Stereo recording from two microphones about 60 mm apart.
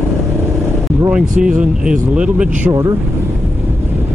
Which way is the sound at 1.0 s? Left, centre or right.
Centre.